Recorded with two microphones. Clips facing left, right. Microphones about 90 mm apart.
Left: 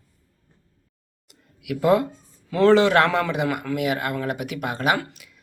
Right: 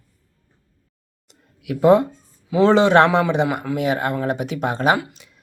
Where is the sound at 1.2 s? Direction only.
30° right (ahead or behind).